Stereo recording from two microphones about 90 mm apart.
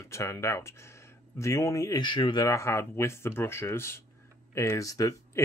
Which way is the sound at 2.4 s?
30° left (ahead or behind).